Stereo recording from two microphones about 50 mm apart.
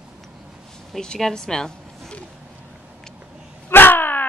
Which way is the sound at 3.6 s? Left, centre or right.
Left.